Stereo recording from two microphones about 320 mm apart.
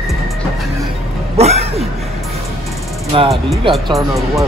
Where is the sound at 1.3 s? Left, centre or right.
Centre.